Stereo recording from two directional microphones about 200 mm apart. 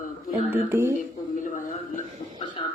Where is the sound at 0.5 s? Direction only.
10° right (ahead or behind).